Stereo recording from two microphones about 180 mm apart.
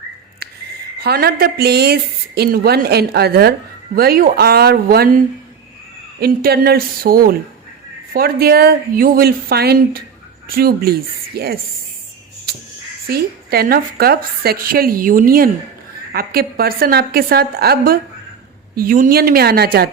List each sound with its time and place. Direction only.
0.9 s a woman's voice: 60° right (ahead or behind)
12.5 s crow: 65° right (ahead or behind)
13.1 s a woman's voice: 60° right (ahead or behind)